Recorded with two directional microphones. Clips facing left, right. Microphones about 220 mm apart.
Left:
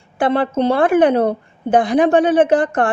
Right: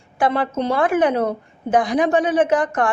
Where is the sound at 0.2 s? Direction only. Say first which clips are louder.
Left 4 dB; 30° left (ahead or behind).